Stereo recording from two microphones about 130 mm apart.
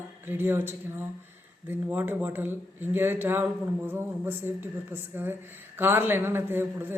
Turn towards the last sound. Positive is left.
turn(degrees=-15)  # may be behind; listen again after turning